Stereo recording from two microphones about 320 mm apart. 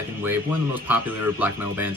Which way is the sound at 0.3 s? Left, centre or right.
Centre.